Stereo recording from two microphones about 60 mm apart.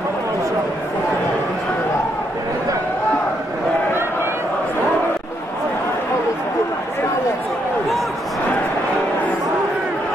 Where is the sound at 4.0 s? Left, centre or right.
Right.